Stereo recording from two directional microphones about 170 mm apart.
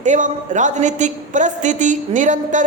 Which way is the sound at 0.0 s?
45° right (ahead or behind).